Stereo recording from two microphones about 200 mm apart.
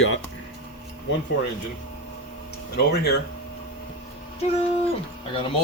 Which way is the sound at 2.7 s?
55° left (ahead or behind).